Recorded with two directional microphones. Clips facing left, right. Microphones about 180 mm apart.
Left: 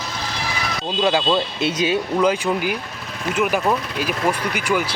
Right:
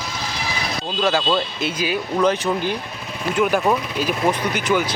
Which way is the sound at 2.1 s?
10° left (ahead or behind).